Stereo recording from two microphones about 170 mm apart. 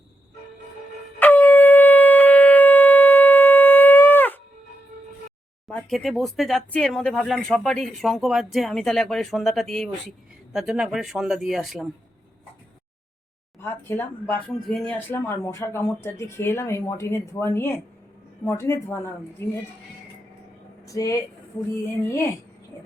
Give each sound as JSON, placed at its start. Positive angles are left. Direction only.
{"t": 1.2, "sound": "shofar", "side_deg": 10}
{"t": 5.6, "sound": "speech", "side_deg": 0}
{"t": 13.6, "sound": "speech", "side_deg": 15}
{"t": 14.5, "sound": "speech", "side_deg": 0}
{"t": 20.8, "sound": "speech", "side_deg": 20}